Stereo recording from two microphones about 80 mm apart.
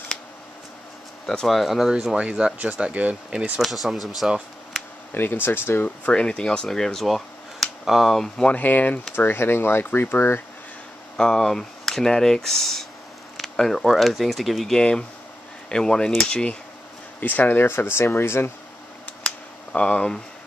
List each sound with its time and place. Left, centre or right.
1.2 s speech: centre
5.1 s speech: left
6.1 s speech: centre
8.5 s speech: left
11.1 s speech: centre
17.2 s speech: left
19.2 s a sound: centre